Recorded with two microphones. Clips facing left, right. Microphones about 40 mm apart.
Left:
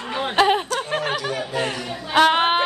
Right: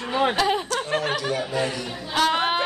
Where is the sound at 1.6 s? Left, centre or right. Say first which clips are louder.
Left 2 dB; left.